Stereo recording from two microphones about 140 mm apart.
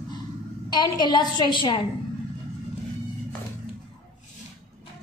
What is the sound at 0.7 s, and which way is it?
A woman's voice, 30° left (ahead or behind).